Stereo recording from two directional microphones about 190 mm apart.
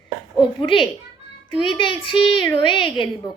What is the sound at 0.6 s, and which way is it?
A woman's voice, 25° left (ahead or behind).